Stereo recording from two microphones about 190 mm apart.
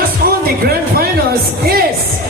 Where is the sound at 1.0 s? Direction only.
55° right (ahead or behind).